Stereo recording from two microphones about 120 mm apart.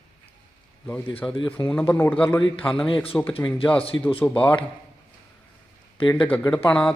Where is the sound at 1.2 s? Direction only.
Centre (ahead or behind).